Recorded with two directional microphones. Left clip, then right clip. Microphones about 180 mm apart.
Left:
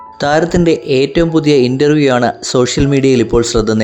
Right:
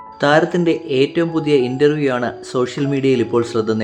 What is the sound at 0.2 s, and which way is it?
Speech, 30° left (ahead or behind).